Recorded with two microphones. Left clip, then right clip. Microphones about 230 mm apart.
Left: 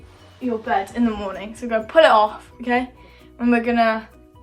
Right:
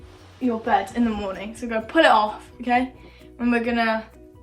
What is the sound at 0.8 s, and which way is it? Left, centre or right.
A woman's voice, centre.